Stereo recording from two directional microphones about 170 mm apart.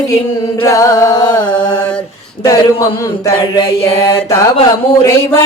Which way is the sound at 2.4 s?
20° left (ahead or behind).